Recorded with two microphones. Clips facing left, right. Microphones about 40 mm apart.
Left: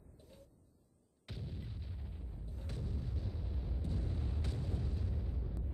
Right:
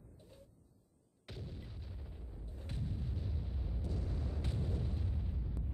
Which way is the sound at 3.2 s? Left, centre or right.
Centre.